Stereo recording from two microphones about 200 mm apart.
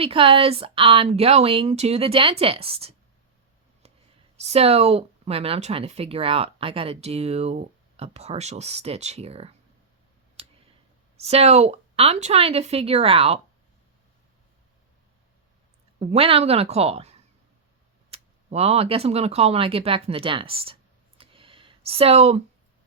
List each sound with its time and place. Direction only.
0.0 s speech: 30° right (ahead or behind)
4.4 s speech: 30° right (ahead or behind)
11.3 s speech: 30° right (ahead or behind)
16.0 s speech: 30° right (ahead or behind)
21.2 s a sound: 25° right (ahead or behind)